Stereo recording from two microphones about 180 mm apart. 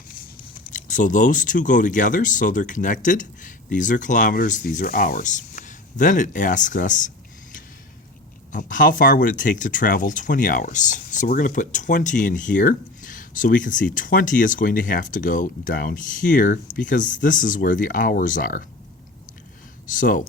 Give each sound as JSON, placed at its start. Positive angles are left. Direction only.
{"t": 0.7, "sound": "speech", "side_deg": 45}
{"t": 8.5, "sound": "speech", "side_deg": 45}
{"t": 19.9, "sound": "speech", "side_deg": 50}